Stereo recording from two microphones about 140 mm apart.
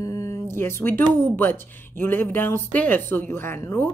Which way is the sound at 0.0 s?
20° left (ahead or behind).